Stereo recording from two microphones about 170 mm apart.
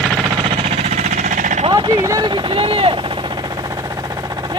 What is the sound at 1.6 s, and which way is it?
Speech, 25° right (ahead or behind).